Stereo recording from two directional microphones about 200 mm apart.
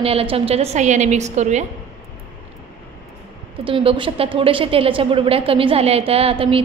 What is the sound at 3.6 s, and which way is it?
A woman's voice, 25° right (ahead or behind).